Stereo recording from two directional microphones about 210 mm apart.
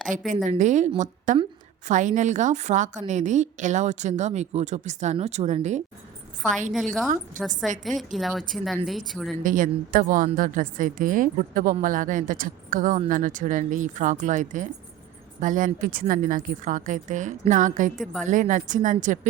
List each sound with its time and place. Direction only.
0.1 s a woman's voice: 35° right (ahead or behind)
6.7 s speech: centre (ahead or behind)
7.3 s a woman's voice: 40° right (ahead or behind)
7.9 s speech: centre (ahead or behind)
9.4 s a woman's voice: 40° right (ahead or behind)
18.0 s speech: centre (ahead or behind)
18.3 s a woman's voice: 35° right (ahead or behind)